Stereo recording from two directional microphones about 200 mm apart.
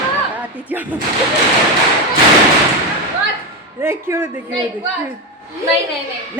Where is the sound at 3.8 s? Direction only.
10° right (ahead or behind).